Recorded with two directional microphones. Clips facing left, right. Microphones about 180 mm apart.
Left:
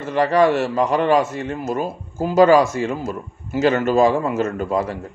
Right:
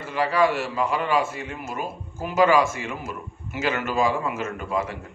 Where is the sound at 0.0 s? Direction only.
40° left (ahead or behind).